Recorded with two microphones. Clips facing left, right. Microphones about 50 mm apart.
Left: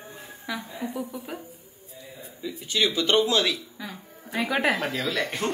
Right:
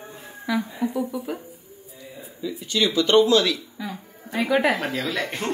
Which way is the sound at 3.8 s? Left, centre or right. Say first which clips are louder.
Right 5 dB; centre.